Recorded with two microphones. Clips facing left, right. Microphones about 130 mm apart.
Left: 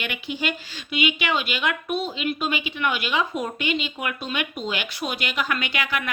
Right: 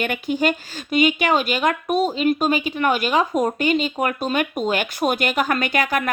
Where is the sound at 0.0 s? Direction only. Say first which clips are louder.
Right 8 dB; 45° right (ahead or behind).